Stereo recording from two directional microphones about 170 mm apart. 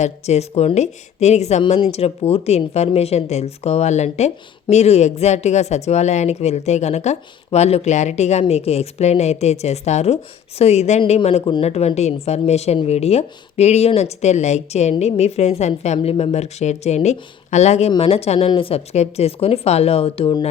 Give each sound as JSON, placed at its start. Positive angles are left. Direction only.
{"t": 0.0, "sound": "a woman's voice", "side_deg": 40}